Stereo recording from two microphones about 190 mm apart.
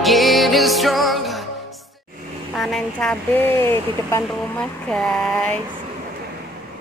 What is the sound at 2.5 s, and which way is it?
Speech, centre (ahead or behind).